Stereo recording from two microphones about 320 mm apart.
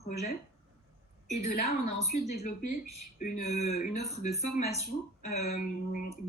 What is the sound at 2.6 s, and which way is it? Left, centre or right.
Speech, left.